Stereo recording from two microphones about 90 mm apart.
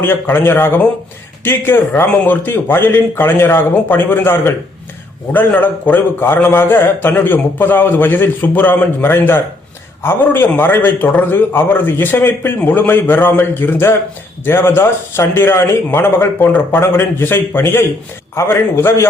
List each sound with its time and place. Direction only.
0.0 s a man's voice: 25° left (ahead or behind)